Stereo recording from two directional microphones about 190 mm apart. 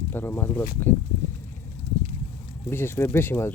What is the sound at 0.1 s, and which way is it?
Speech, 10° left (ahead or behind).